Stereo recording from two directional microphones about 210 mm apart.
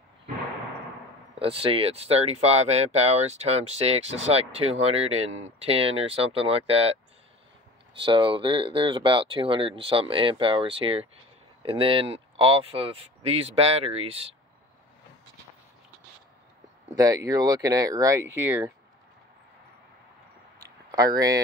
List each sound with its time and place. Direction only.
1.4 s speech: 25° right (ahead or behind)
8.0 s speech: 25° right (ahead or behind)
16.9 s speech: 15° right (ahead or behind)
20.5 s a sound: 15° right (ahead or behind)